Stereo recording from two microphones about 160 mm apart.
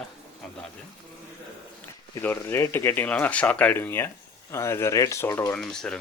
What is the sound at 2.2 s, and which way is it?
Speech, 15° left (ahead or behind).